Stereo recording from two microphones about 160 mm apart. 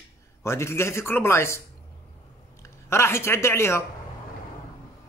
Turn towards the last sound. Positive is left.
turn(degrees=15)  # may be behind; listen again after turning